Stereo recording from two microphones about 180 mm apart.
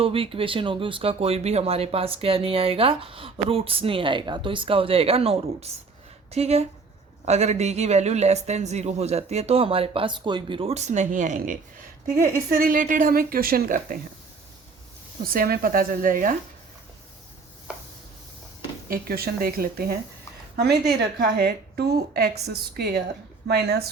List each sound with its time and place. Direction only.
0.0 s a woman's voice: 30° right (ahead or behind); by 14.0 s 50° right (ahead or behind)
15.2 s a woman's voice: 55° right (ahead or behind)
18.9 s a woman's voice: 55° right (ahead or behind)